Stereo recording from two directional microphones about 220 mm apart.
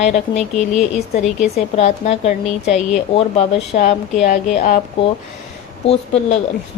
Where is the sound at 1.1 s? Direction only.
30° left (ahead or behind).